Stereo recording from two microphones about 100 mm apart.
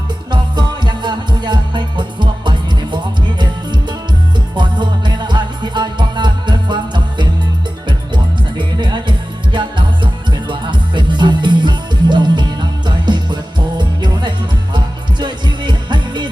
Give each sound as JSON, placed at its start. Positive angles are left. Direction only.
{"t": 0.3, "sound": "music", "side_deg": -50}
{"t": 4.5, "sound": "music", "side_deg": -50}